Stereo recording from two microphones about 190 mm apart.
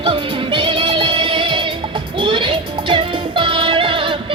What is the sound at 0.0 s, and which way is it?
Music, 25° right (ahead or behind).